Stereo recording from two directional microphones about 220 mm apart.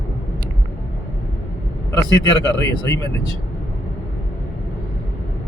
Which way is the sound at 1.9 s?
15° left (ahead or behind).